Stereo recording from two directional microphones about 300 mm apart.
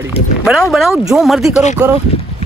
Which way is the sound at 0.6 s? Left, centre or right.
Centre.